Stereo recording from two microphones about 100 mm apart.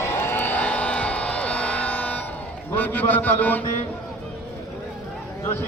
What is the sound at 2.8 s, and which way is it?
Mantra, 20° left (ahead or behind).